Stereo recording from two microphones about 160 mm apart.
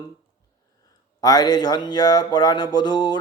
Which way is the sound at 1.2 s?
25° left (ahead or behind).